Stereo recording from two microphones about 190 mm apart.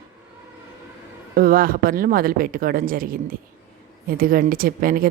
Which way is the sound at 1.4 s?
50° right (ahead or behind).